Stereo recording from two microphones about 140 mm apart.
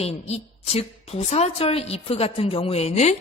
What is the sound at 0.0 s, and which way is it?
A woman's voice, 50° left (ahead or behind).